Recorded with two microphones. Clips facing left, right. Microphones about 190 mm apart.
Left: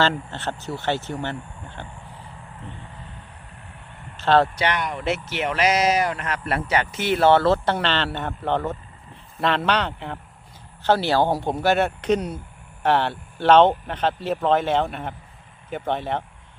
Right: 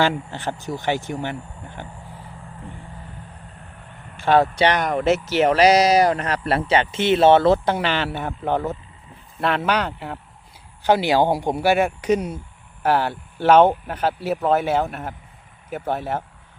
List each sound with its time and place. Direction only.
0.0 s speech: 10° right (ahead or behind)
4.2 s speech: 10° right (ahead or behind)
4.5 s speech: 35° right (ahead or behind); by 16.2 s 5° right (ahead or behind)